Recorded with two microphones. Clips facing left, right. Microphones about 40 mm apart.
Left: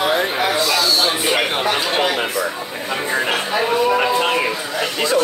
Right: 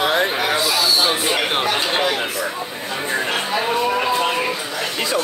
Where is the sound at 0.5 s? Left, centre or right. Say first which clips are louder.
Left 1 dB; centre.